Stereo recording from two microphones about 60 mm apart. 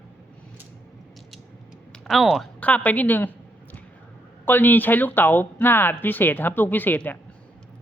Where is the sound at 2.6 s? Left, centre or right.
Left.